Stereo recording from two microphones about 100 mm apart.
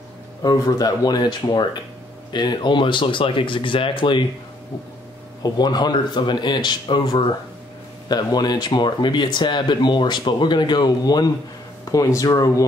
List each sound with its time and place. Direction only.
0.4 s speech: 40° left (ahead or behind)
5.4 s speech: 45° left (ahead or behind)
8.1 s speech: 45° left (ahead or behind)